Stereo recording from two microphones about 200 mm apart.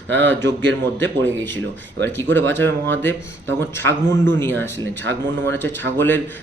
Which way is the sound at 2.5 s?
10° left (ahead or behind).